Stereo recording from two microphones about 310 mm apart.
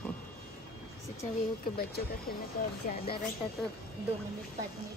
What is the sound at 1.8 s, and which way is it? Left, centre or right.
Speech, left.